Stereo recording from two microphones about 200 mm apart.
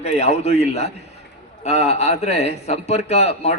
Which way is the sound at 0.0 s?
35° left (ahead or behind).